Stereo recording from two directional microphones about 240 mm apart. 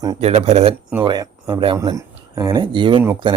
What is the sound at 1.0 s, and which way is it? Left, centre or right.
Speech, centre.